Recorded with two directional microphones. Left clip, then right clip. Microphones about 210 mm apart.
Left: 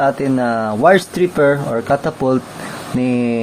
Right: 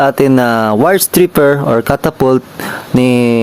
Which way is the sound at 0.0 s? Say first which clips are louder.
Right 6 dB; 55° right (ahead or behind).